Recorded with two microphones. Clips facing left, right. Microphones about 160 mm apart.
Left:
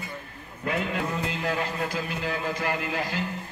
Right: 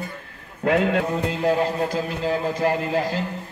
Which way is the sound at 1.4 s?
30° right (ahead or behind).